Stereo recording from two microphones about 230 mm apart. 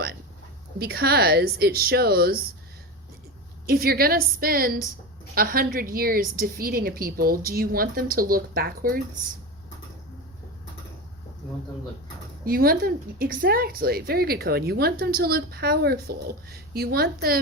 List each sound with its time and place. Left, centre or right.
0.8 s speech: right
3.7 s a woman's voice: right
12.5 s a woman's voice: right